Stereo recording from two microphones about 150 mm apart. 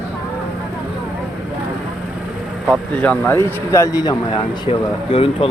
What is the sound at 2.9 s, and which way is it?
Speech, 10° left (ahead or behind).